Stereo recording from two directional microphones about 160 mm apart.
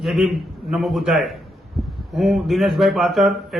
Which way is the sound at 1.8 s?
Centre (ahead or behind).